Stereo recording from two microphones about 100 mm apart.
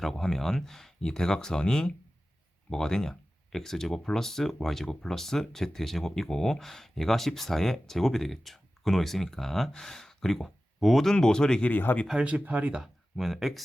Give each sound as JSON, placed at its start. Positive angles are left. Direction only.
{"t": 0.0, "sound": "speech", "side_deg": 5}
{"t": 11.7, "sound": "speech", "side_deg": 20}
{"t": 12.0, "sound": "speech", "side_deg": -10}